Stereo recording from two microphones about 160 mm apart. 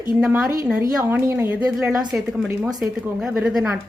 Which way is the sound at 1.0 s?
15° right (ahead or behind).